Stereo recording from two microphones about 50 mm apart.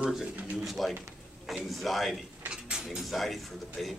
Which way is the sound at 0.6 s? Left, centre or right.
Centre.